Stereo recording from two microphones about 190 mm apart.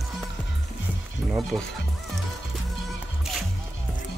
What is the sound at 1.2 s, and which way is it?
Music, centre (ahead or behind).